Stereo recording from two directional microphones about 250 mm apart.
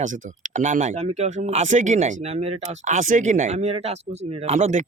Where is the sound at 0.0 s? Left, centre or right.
Right.